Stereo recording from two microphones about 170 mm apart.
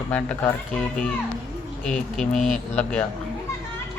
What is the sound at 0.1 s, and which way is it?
Speech, 10° left (ahead or behind).